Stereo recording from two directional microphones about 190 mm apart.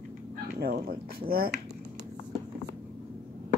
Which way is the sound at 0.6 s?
55° right (ahead or behind).